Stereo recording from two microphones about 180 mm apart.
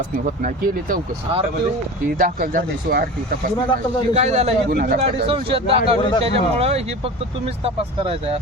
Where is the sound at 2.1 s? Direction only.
50° right (ahead or behind).